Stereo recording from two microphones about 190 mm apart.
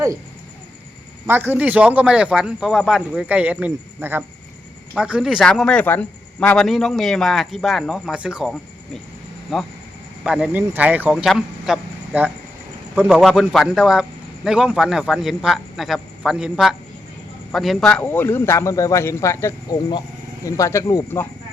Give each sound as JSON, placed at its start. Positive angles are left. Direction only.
{"t": 1.3, "sound": "a man's voice", "side_deg": -10}